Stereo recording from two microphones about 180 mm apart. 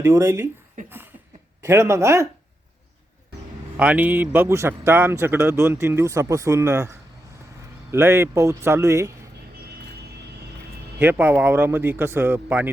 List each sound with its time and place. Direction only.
0.0 s a man's voice: 15° right (ahead or behind)
0.9 s a sound: 10° right (ahead or behind)
1.6 s a man's voice: 15° right (ahead or behind)
3.8 s a man's voice: 5° right (ahead or behind)
11.0 s a man's voice: 10° right (ahead or behind)